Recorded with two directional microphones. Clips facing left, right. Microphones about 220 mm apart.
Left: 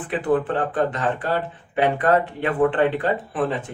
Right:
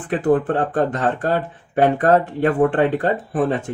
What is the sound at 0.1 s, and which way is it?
Speech, 45° right (ahead or behind).